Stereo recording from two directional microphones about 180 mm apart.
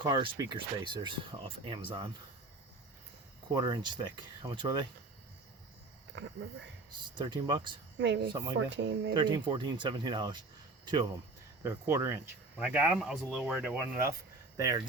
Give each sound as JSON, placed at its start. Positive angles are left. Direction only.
{"t": 0.0, "sound": "speech", "side_deg": -25}
{"t": 3.5, "sound": "speech", "side_deg": -20}
{"t": 6.1, "sound": "speech", "side_deg": -80}
{"t": 7.0, "sound": "speech", "side_deg": -25}
{"t": 7.9, "sound": "speech", "side_deg": -90}
{"t": 9.1, "sound": "speech", "side_deg": -25}
{"t": 11.6, "sound": "speech", "side_deg": -15}